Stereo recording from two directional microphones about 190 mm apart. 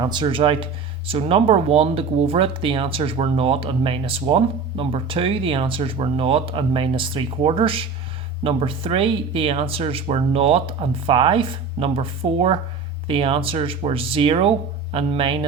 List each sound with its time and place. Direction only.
0.0 s speech: 25° right (ahead or behind)